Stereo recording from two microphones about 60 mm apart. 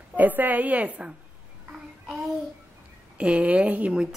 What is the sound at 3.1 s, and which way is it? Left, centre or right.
Speech, right.